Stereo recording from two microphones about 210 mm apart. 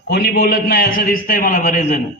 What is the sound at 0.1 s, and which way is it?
A man's voice, 50° left (ahead or behind).